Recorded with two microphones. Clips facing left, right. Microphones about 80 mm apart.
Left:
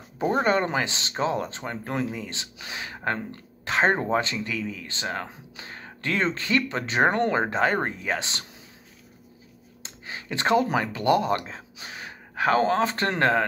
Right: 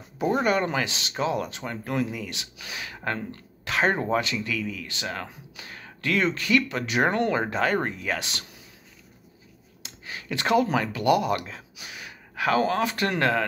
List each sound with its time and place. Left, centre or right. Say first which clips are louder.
0.2 s speech: left 1 dB; left
9.8 s speech: even; left